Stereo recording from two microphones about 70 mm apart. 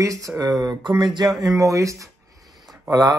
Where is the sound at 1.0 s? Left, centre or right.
Right.